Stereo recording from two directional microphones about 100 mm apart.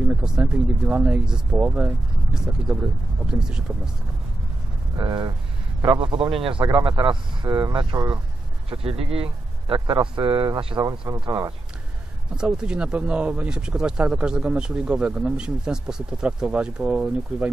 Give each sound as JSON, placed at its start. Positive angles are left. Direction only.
{"t": 0.1, "sound": "speech", "side_deg": -10}
{"t": 4.9, "sound": "speech", "side_deg": -45}
{"t": 5.9, "sound": "a man's voice", "side_deg": -55}
{"t": 8.6, "sound": "speech", "side_deg": -70}
{"t": 9.8, "sound": "speech", "side_deg": -45}
{"t": 10.8, "sound": "speech", "side_deg": -35}
{"t": 12.4, "sound": "speech", "side_deg": -10}